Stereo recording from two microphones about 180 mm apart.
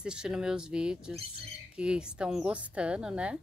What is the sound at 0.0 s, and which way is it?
A woman's voice, 5° right (ahead or behind).